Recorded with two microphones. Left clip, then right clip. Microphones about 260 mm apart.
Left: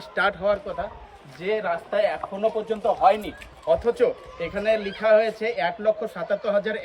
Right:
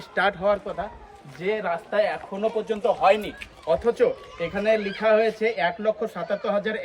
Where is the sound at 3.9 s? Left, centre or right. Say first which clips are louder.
Even; centre.